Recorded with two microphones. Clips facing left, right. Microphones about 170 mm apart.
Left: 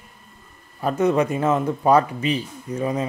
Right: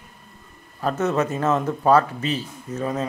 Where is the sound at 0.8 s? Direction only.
10° left (ahead or behind).